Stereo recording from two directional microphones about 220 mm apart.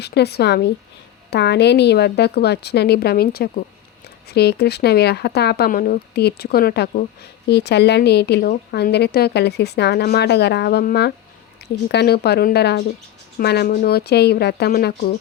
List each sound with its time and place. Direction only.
0.0 s a woman's voice: 50° left (ahead or behind)